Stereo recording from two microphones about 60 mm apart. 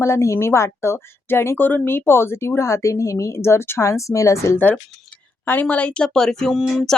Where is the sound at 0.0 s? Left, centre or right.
Left.